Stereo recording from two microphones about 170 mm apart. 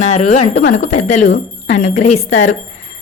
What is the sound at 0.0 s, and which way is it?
Speech, 45° left (ahead or behind).